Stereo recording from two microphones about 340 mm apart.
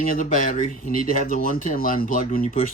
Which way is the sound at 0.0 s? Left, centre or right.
Left.